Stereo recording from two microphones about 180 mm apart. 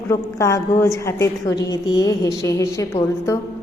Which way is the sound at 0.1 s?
15° left (ahead or behind).